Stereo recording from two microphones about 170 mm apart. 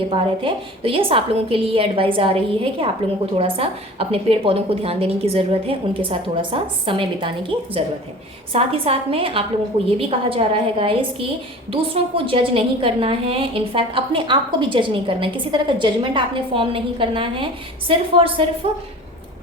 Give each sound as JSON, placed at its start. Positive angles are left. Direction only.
{"t": 0.1, "sound": "a woman's voice", "side_deg": -30}